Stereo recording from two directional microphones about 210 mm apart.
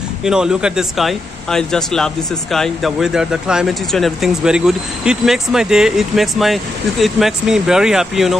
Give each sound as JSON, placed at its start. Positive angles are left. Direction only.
{"t": 0.2, "sound": "speech", "side_deg": -5}